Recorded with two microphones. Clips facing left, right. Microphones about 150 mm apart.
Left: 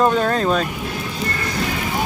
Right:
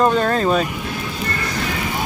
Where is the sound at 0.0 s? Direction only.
Centre (ahead or behind).